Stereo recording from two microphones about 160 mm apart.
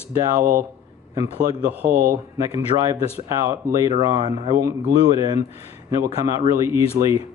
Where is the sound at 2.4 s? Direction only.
20° right (ahead or behind).